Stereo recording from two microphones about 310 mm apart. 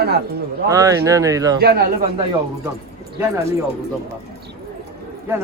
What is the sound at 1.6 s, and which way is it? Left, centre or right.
Speech, right.